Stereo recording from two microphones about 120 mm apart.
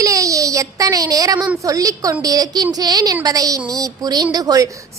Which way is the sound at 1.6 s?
30° right (ahead or behind).